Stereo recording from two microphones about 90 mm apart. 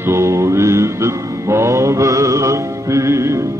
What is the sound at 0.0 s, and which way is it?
Mantra, 30° right (ahead or behind).